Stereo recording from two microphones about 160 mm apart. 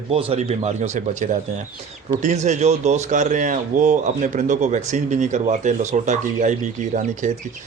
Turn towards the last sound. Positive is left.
turn(degrees=-50)  # may be behind; listen again after turning